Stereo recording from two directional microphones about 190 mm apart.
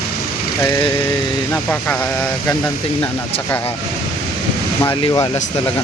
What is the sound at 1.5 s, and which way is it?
Speech, 10° left (ahead or behind).